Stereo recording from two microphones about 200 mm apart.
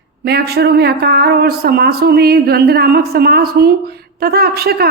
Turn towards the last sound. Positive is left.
turn(degrees=-50)  # may be behind; listen again after turning